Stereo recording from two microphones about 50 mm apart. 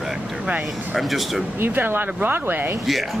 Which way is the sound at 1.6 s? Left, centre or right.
Right.